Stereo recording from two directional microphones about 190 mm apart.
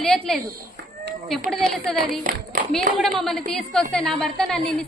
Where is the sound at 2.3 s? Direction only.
45° right (ahead or behind).